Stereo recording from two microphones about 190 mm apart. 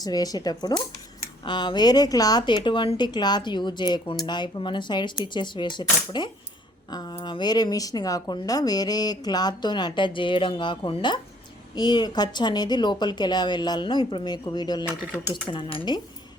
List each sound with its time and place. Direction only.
0.0 s speech: 20° left (ahead or behind)